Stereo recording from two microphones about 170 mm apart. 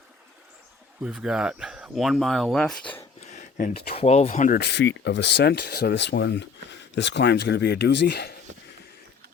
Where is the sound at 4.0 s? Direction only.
40° left (ahead or behind).